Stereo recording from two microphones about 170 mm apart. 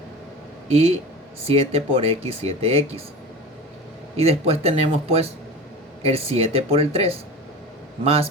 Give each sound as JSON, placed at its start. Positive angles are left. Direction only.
{"t": 0.7, "sound": "speech", "side_deg": -35}
{"t": 4.2, "sound": "speech", "side_deg": -35}